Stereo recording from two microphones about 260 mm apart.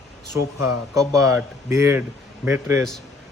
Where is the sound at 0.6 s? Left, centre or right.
Centre.